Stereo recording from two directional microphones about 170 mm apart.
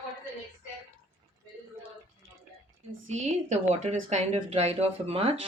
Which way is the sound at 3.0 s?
45° right (ahead or behind).